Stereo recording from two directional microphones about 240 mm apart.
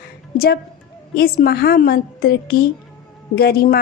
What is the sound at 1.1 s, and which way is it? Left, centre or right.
A woman's voice, left.